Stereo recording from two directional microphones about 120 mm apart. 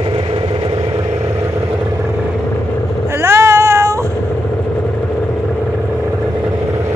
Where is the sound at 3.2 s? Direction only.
20° right (ahead or behind).